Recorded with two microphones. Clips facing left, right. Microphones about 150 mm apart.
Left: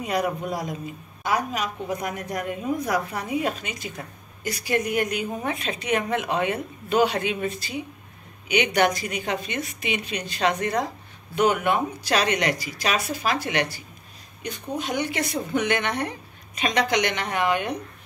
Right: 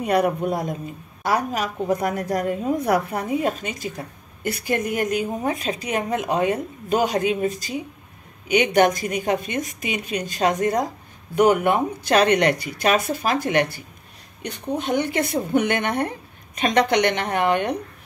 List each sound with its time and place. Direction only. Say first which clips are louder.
0.0 s speech: right 5 dB; 60° right (ahead or behind)
1.3 s a woman's voice: right 3 dB; 40° right (ahead or behind)
2.8 s speech: right 5 dB; 55° right (ahead or behind)
4.4 s a woman's voice: right 2 dB; 55° right (ahead or behind)